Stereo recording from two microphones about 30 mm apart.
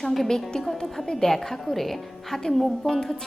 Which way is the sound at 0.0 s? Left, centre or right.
Centre.